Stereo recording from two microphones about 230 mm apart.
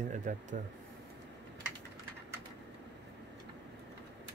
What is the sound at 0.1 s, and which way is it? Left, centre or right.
Speech, right.